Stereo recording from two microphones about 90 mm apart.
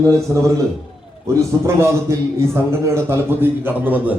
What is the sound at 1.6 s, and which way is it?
A man's voice, 30° right (ahead or behind).